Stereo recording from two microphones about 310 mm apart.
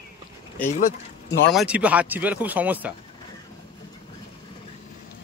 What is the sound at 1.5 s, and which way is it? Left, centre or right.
Speech, centre.